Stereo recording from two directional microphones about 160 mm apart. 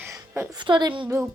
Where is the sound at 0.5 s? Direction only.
30° right (ahead or behind).